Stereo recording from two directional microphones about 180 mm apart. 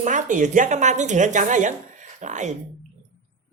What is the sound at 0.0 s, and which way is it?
A man's voice, 45° right (ahead or behind).